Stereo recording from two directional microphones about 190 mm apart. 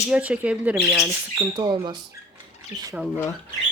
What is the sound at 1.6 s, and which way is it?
Speech, 25° right (ahead or behind).